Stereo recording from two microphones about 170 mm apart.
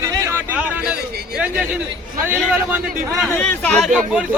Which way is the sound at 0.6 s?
5° right (ahead or behind).